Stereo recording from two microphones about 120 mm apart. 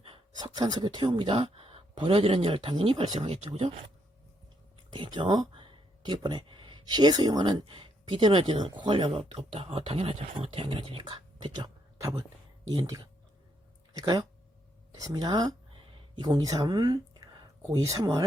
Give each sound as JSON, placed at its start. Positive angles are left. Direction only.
{"t": 0.3, "sound": "speech", "side_deg": -35}
{"t": 4.9, "sound": "speech", "side_deg": -40}
{"t": 14.0, "sound": "speech", "side_deg": -40}